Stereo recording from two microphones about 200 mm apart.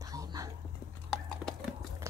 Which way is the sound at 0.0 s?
15° right (ahead or behind).